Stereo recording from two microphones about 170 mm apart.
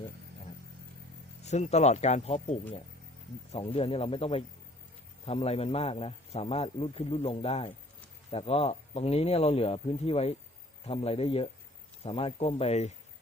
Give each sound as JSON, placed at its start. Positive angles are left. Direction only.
{"t": 1.5, "sound": "a man's voice", "side_deg": 40}